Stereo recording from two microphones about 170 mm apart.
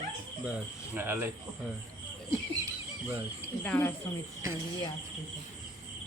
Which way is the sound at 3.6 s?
10° left (ahead or behind).